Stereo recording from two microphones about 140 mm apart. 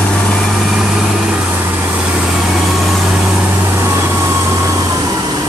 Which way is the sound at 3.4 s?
15° right (ahead or behind).